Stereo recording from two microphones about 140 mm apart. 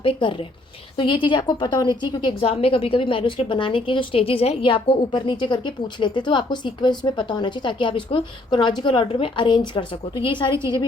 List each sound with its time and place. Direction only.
0.0 s a woman's voice: 40° left (ahead or behind)